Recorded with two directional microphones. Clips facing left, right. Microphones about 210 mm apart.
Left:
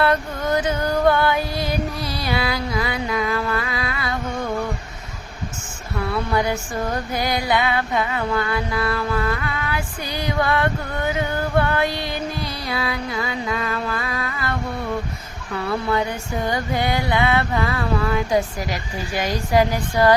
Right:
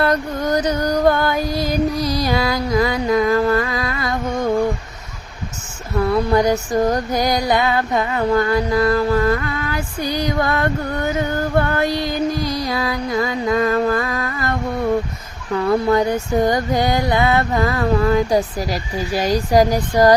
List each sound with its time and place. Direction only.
0.0 s music: 40° right (ahead or behind)
6.0 s music: 40° right (ahead or behind)
15.5 s music: 40° right (ahead or behind)